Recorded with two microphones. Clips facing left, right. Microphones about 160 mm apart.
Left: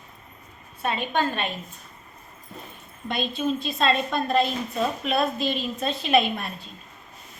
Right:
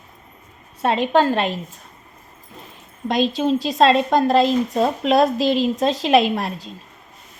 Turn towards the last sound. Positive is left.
turn(degrees=-90)